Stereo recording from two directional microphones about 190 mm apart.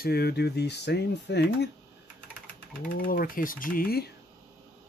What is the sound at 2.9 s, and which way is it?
Speech, 45° left (ahead or behind).